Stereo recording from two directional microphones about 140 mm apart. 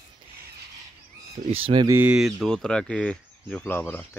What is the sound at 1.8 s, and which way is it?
Speech, 20° right (ahead or behind).